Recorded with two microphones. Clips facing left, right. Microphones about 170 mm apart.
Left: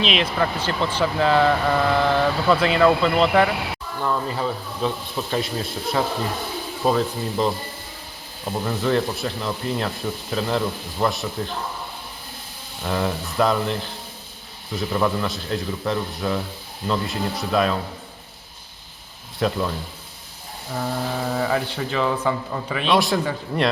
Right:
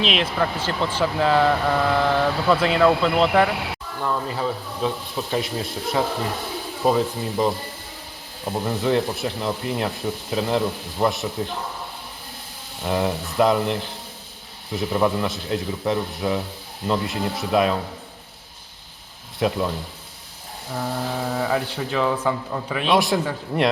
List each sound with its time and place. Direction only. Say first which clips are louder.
0.0 s speech: even; centre (ahead or behind)
5.3 s speech: even; 15° right (ahead or behind)
12.8 s speech: right 1 dB; 15° right (ahead or behind)
19.4 s speech: right 1 dB; 15° right (ahead or behind)
20.7 s speech: left 1 dB; centre (ahead or behind)
23.0 s a man's voice: even; 20° right (ahead or behind)